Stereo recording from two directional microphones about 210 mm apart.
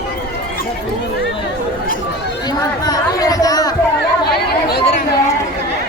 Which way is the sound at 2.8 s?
20° left (ahead or behind).